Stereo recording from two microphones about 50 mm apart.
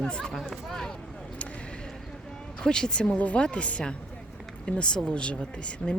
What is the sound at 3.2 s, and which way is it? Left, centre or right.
Speech, left.